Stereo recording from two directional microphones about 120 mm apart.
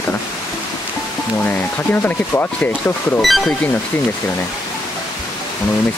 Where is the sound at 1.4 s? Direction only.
15° left (ahead or behind).